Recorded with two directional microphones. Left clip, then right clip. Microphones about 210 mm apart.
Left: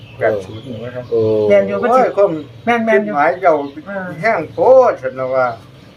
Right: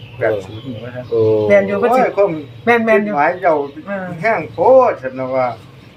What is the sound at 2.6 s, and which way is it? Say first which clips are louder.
Speech: right 2 dB; 50° right (ahead or behind).